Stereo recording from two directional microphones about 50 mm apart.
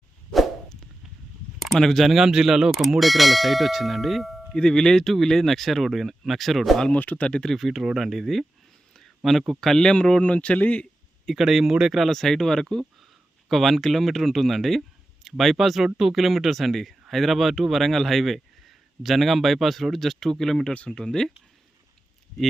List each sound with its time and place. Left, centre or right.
0.3 s whoosh: centre
1.5 s speech: centre
2.2 s speech: centre
4.5 s speech: centre
6.9 s speech: left
7.3 s speech: centre
7.5 s speech: centre
9.0 s a sound: centre
9.5 s speech: centre
9.7 s a man's voice: centre
11.3 s speech: centre
20.7 s speech: centre